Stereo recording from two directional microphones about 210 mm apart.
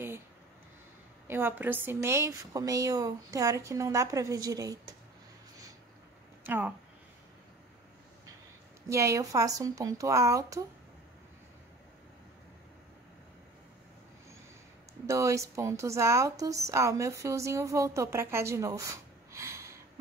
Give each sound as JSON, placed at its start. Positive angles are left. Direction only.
{"t": 1.2, "sound": "a woman's voice", "side_deg": -10}
{"t": 6.4, "sound": "speech", "side_deg": -10}
{"t": 8.8, "sound": "a woman's voice", "side_deg": -15}
{"t": 15.0, "sound": "a woman's voice", "side_deg": -15}